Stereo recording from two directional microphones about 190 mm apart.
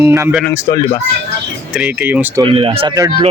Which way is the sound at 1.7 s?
5° right (ahead or behind).